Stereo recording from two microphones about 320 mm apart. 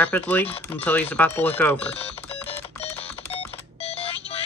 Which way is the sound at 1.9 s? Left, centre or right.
Centre.